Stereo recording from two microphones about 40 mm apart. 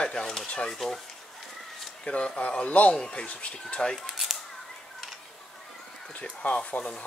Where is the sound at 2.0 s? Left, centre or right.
Left.